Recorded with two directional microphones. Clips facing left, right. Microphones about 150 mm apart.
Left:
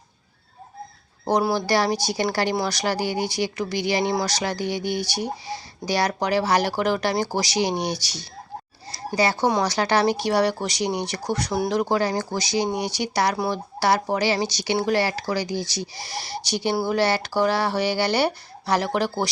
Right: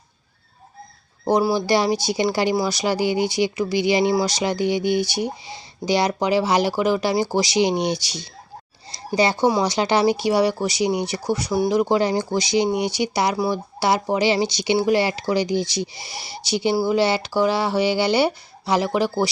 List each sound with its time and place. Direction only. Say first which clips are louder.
1.5 s speech: right 2 dB; 15° right (ahead or behind)
8.9 s a sound: right 2 dB; 20° right (ahead or behind)
9.5 s speech: right 2 dB; 10° right (ahead or behind)
11.9 s speech: right 3 dB; 20° right (ahead or behind)